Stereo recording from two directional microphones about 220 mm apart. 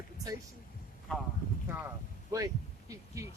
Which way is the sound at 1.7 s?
10° right (ahead or behind).